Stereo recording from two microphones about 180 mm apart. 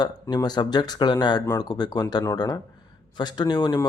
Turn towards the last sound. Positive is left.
turn(degrees=20)  # may be behind; listen again after turning